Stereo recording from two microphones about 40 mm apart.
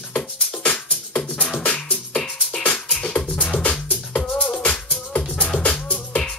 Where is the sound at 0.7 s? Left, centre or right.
Left.